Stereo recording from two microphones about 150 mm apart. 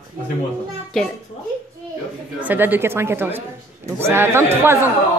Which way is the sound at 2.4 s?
10° right (ahead or behind).